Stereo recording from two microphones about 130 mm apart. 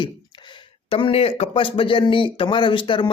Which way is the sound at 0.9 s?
45° left (ahead or behind).